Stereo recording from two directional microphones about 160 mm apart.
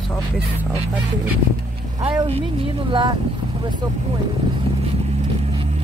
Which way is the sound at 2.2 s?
35° right (ahead or behind).